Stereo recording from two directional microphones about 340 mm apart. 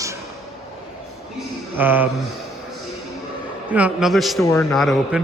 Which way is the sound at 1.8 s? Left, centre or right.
Centre.